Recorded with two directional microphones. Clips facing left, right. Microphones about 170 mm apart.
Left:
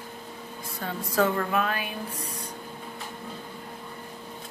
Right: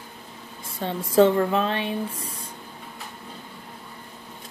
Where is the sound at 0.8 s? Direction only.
25° right (ahead or behind).